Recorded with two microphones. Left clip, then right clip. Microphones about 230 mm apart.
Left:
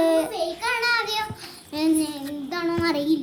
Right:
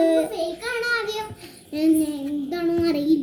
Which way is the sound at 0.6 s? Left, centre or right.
Centre.